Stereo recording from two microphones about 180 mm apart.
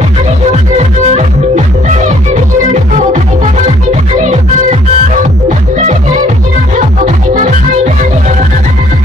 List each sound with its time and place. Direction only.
0.5 s music: 40° right (ahead or behind)